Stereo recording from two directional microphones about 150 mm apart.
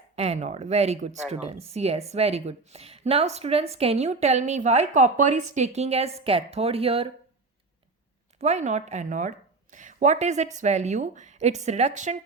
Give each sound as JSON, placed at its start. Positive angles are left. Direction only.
{"t": 0.2, "sound": "a woman's voice", "side_deg": -45}
{"t": 8.4, "sound": "a woman's voice", "side_deg": -50}